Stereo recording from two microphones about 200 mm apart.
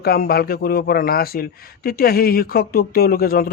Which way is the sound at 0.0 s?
50° left (ahead or behind).